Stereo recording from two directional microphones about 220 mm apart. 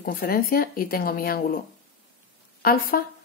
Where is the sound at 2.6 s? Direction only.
45° left (ahead or behind).